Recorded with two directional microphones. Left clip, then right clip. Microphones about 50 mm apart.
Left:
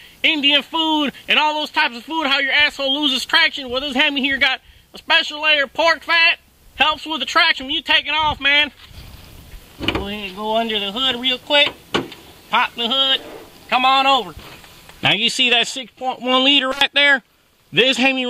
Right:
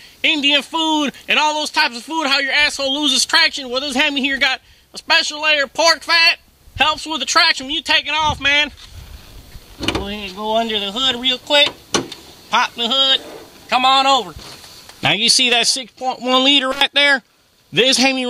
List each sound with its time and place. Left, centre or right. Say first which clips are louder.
0.2 s speech: even; centre
9.8 s speech: right 1 dB; centre
11.9 s vehicle: right 2 dB; centre
13.7 s speech: right 1 dB; centre